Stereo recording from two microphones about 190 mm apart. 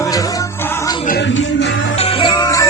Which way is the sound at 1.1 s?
65° left (ahead or behind).